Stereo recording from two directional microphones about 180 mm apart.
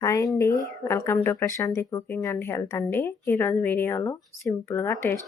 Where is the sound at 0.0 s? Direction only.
15° left (ahead or behind).